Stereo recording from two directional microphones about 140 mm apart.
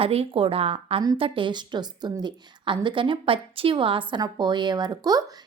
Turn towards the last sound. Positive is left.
turn(degrees=-25)  # may be behind; listen again after turning